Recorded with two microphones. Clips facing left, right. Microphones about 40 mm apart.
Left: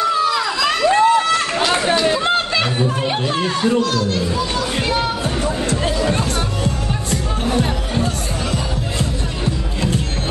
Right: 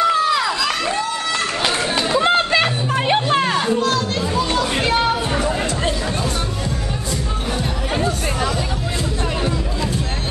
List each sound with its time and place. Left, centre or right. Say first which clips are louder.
0.0 s vehicle: right 1 dB; centre
2.1 s chatter: right 2 dB; centre
3.4 s music: even; centre
7.9 s music: right 1 dB; right